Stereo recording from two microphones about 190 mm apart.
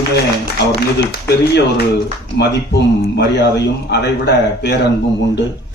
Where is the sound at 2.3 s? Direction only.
60° left (ahead or behind).